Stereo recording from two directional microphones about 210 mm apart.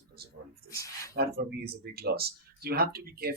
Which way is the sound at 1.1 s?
50° right (ahead or behind).